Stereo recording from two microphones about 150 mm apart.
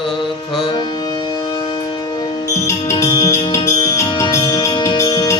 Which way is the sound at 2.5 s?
20° left (ahead or behind).